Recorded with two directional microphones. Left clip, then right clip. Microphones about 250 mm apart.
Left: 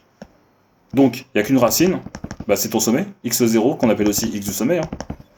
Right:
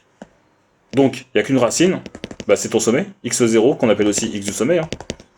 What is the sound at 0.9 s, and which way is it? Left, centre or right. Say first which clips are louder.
Speech: right 1 dB; right.